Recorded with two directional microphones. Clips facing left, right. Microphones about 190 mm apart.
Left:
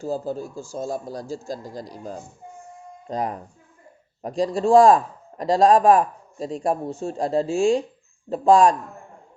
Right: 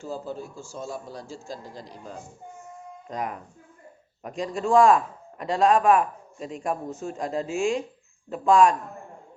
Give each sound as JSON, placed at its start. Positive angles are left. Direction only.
{"t": 0.0, "sound": "a man's voice", "side_deg": 40}